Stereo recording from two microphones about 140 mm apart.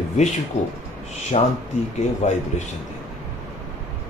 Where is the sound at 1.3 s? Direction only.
50° left (ahead or behind).